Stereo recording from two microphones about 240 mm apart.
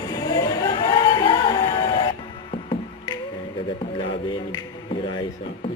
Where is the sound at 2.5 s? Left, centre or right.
Left.